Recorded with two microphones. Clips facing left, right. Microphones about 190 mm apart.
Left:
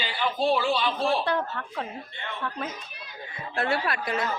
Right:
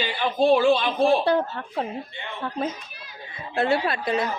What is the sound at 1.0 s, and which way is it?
Speech, 25° right (ahead or behind).